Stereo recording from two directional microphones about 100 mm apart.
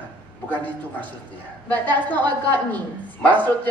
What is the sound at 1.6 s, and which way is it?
Speech, 15° left (ahead or behind).